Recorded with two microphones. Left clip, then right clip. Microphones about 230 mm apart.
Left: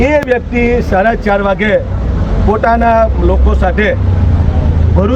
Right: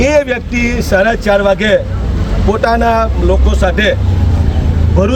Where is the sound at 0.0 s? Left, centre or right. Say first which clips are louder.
Even; right.